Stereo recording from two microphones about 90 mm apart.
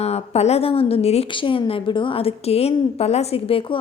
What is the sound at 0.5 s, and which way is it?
A woman's voice, 90° left.